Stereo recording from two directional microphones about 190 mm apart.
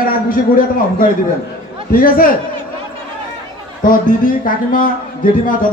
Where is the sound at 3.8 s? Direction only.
45° left (ahead or behind).